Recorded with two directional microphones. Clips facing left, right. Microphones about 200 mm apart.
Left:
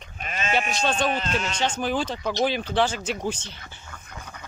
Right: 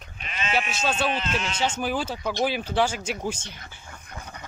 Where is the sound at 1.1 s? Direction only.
40° left (ahead or behind).